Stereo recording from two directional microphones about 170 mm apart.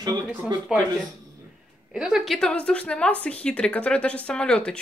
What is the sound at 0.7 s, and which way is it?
Speech, 5° right (ahead or behind).